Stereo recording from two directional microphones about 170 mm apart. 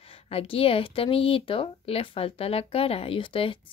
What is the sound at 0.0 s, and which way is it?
Speech, 35° left (ahead or behind).